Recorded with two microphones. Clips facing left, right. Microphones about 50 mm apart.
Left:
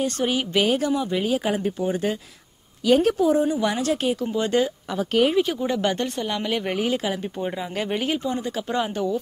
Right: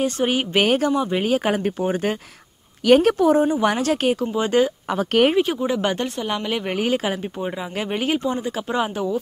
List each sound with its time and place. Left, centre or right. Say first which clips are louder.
0.0 s speech: right 3 dB; right
2.8 s speech: right 4 dB; right
3.6 s speech: right 3 dB; right
4.3 s speech: right 3 dB; right; by 6.7 s centre
6.8 s speech: right 2 dB; right
7.3 s speech: right 1 dB; centre
8.0 s speech: right 3 dB; right
8.6 s speech: right 2 dB; centre